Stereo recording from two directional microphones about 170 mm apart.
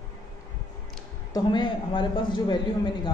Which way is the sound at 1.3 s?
25° left (ahead or behind).